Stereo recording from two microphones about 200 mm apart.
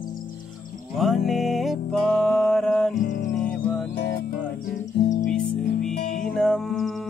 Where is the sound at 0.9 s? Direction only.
Centre (ahead or behind).